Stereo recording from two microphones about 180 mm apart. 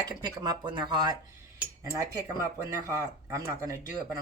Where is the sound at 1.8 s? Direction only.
20° right (ahead or behind).